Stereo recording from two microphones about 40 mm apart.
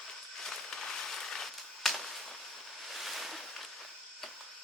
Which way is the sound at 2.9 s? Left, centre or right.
Centre.